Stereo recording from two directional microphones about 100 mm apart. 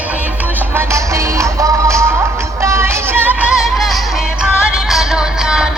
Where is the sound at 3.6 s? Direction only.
Centre (ahead or behind).